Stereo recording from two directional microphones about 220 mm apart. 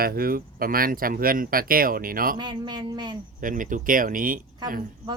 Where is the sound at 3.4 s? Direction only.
35° right (ahead or behind).